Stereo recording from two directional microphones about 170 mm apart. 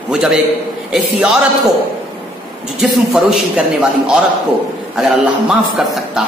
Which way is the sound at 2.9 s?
Centre (ahead or behind).